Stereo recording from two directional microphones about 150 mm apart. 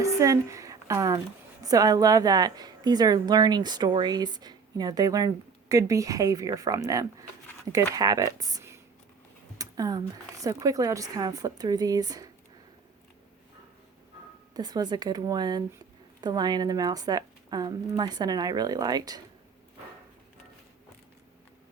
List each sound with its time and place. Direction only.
0.0 s a woman's voice: 20° right (ahead or behind)
14.5 s a woman's voice: 25° right (ahead or behind)